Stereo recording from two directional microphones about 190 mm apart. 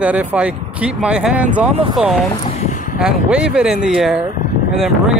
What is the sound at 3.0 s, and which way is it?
Speech, 5° right (ahead or behind).